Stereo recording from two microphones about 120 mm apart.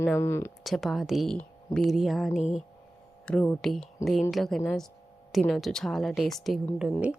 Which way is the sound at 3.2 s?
10° left (ahead or behind).